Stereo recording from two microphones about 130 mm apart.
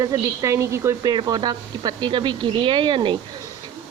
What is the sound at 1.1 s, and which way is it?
Speech, 35° right (ahead or behind).